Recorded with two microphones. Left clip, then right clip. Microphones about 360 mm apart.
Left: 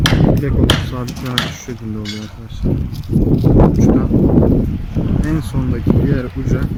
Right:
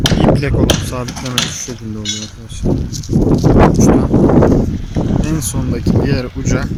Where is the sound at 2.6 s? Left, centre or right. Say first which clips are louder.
Right 4 dB; right.